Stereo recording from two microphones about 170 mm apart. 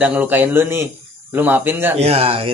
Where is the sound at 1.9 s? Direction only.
35° right (ahead or behind).